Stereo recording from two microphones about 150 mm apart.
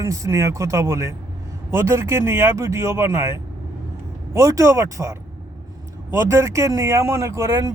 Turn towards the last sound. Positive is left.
turn(degrees=-20)  # may be behind; listen again after turning